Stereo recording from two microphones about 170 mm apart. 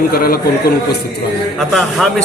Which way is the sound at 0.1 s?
60° left (ahead or behind).